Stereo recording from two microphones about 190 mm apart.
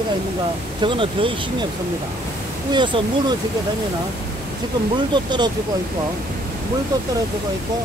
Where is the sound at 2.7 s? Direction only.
25° right (ahead or behind).